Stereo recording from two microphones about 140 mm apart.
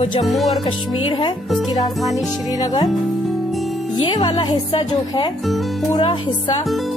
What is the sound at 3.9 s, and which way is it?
Speech, 30° left (ahead or behind).